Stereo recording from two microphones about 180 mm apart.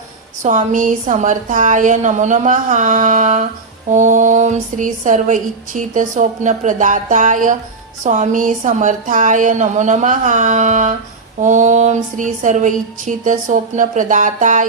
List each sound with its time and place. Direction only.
0.4 s speech: 45° right (ahead or behind)